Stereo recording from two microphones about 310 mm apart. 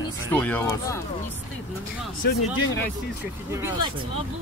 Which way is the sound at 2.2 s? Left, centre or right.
Left.